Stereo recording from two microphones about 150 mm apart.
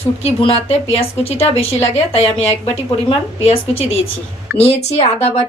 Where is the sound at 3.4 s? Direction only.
40° left (ahead or behind).